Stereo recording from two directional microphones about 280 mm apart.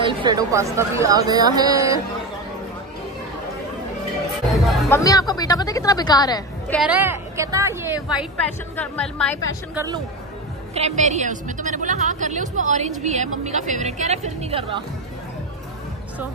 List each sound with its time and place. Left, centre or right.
0.2 s speech: centre
4.5 s speech: centre
6.8 s speech: centre
10.7 s a woman's voice: right